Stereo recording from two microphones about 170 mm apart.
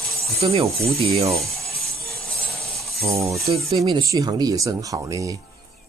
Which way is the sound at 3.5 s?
35° right (ahead or behind).